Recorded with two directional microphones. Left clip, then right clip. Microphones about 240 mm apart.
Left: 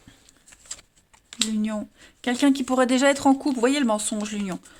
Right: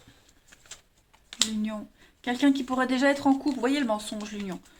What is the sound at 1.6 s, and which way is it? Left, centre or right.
Speech, left.